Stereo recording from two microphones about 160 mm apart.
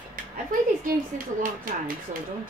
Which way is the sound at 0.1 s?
60° right (ahead or behind).